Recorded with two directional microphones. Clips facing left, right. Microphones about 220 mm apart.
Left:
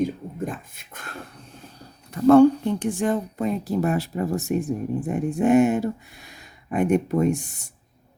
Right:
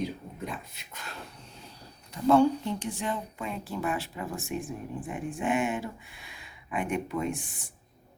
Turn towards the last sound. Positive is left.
turn(degrees=40)  # may be behind; listen again after turning